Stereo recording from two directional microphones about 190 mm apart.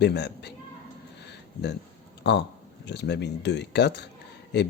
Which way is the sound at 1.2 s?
65° left (ahead or behind).